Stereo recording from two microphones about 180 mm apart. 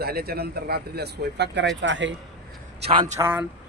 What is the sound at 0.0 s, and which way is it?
Speech, 60° right (ahead or behind).